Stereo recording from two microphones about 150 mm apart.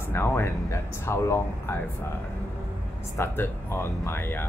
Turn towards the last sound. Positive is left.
turn(degrees=15)  # may be behind; listen again after turning